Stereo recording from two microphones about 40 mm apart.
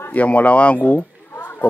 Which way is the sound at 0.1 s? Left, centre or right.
Left.